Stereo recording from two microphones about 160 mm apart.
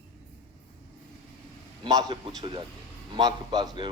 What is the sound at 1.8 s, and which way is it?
A man's voice, 25° right (ahead or behind).